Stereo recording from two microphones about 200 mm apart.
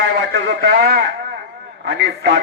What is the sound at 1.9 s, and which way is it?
Speech, 65° right (ahead or behind).